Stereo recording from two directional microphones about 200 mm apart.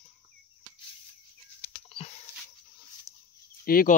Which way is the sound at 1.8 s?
30° left (ahead or behind).